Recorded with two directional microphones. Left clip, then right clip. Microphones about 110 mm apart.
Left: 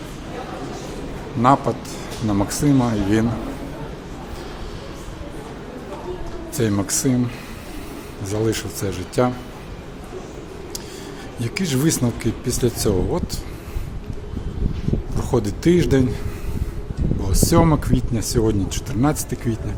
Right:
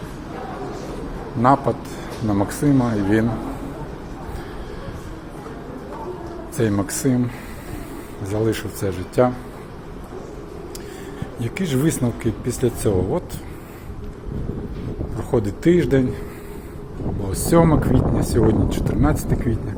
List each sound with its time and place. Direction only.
1.4 s a man's voice: 25° left (ahead or behind)
2.2 s speech: 35° left (ahead or behind)
6.6 s speech: 35° left (ahead or behind)
8.2 s speech: 45° left (ahead or behind)
8.5 s speech: 35° left (ahead or behind)
11.4 s speech: 45° left (ahead or behind)
15.2 s speech: 60° left (ahead or behind)
17.2 s speech: 35° left (ahead or behind)